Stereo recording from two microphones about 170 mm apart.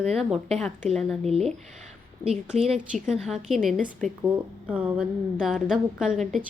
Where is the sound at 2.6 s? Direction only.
40° right (ahead or behind).